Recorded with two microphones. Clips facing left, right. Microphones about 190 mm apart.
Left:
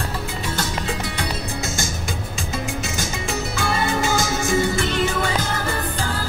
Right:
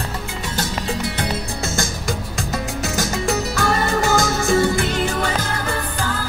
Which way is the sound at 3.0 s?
60° right (ahead or behind).